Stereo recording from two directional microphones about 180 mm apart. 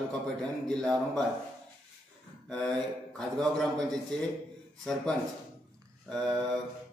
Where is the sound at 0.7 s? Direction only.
5° left (ahead or behind).